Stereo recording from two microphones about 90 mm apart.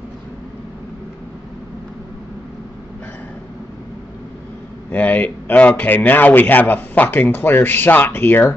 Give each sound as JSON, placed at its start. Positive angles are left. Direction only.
{"t": 4.9, "sound": "a man's voice", "side_deg": 15}